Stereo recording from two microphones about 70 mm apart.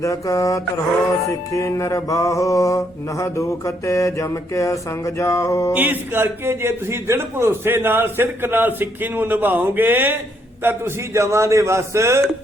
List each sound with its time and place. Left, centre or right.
0.0 s music: left
5.7 s a man's voice: right
11.1 s a man's voice: right